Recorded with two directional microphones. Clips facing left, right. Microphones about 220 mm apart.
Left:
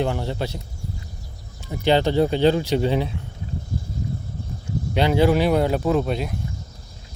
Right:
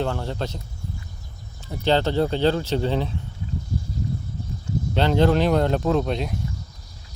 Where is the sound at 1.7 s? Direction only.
15° left (ahead or behind).